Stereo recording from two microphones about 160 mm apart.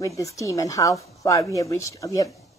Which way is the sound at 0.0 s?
20° left (ahead or behind).